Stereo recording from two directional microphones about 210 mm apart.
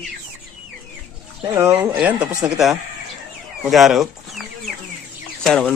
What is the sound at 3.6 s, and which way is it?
Chicken, centre (ahead or behind).